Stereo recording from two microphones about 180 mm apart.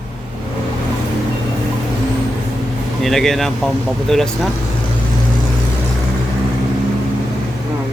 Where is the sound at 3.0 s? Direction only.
Centre (ahead or behind).